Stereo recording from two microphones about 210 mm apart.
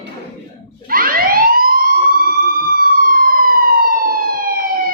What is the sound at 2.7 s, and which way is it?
Police car, 40° right (ahead or behind).